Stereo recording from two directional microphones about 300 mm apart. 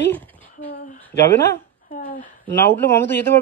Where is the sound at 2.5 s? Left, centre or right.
Centre.